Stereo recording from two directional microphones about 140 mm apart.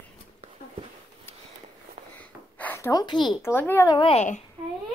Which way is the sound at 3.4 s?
15° left (ahead or behind).